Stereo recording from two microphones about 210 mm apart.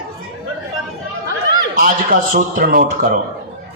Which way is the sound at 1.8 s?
40° right (ahead or behind).